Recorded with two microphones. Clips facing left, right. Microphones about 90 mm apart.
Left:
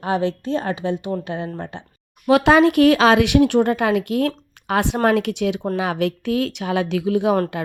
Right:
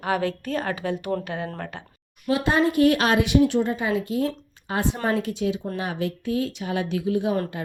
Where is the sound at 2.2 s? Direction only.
80° left.